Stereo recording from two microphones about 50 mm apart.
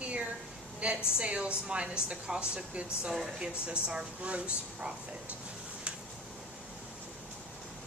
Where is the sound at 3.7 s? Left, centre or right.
Centre.